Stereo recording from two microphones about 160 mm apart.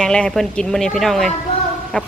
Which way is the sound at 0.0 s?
5° left (ahead or behind).